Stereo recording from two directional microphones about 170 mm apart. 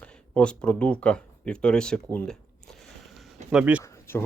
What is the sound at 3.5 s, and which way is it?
Speech, 10° right (ahead or behind).